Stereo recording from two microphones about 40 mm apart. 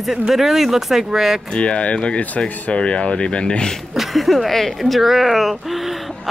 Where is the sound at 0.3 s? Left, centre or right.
Centre.